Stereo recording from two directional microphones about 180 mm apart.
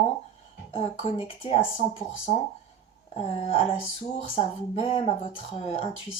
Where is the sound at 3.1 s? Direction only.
35° left (ahead or behind).